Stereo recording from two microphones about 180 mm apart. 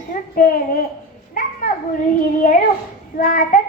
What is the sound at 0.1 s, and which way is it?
Speech, 55° left (ahead or behind).